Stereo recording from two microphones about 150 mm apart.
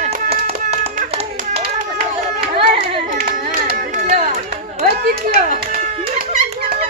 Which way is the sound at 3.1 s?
90° right.